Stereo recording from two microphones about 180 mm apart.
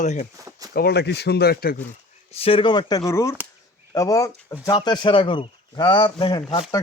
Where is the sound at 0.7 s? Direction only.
60° left (ahead or behind).